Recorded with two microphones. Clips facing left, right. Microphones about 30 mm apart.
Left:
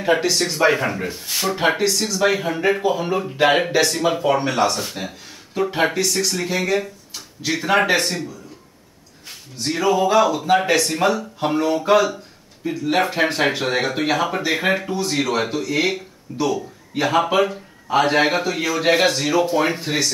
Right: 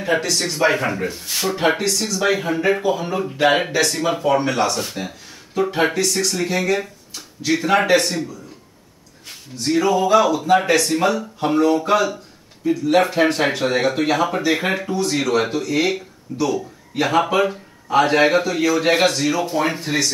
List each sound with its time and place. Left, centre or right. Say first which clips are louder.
0.0 s speech: left 2 dB; centre
9.6 s speech: right 1 dB; centre